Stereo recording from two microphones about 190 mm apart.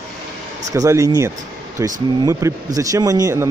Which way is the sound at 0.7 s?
15° right (ahead or behind).